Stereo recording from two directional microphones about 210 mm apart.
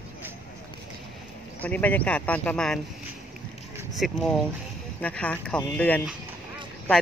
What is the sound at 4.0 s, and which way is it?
Speech, centre (ahead or behind).